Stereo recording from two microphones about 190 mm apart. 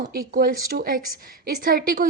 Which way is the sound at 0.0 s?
50° right (ahead or behind).